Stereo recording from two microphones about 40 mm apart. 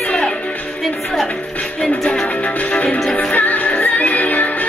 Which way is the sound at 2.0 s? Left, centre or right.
Centre.